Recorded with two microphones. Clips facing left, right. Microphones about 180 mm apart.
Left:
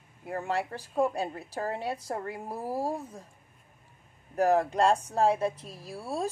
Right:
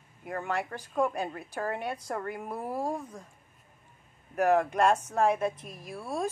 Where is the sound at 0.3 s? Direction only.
30° left (ahead or behind).